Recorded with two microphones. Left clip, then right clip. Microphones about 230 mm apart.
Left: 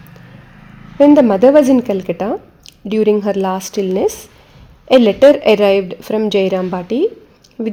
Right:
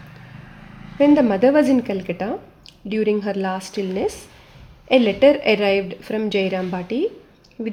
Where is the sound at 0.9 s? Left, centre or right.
Left.